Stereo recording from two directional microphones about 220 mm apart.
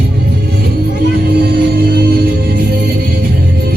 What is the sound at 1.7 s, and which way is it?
Music, 45° right (ahead or behind).